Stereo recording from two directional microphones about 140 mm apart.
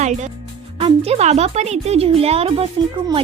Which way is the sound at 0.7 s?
45° right (ahead or behind).